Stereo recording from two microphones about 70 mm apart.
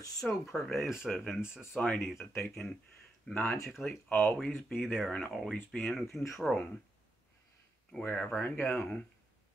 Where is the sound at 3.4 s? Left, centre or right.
Left.